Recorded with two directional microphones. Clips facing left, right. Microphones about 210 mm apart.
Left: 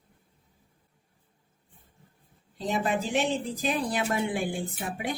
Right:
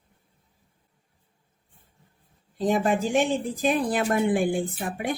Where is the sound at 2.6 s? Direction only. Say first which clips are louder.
Right 5 dB; 50° right (ahead or behind).